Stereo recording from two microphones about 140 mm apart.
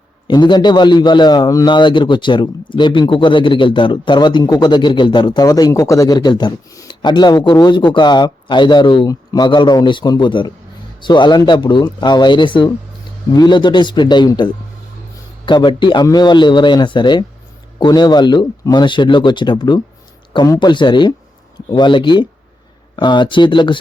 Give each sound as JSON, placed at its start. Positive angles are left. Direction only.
{"t": 0.3, "sound": "a man's voice", "side_deg": 30}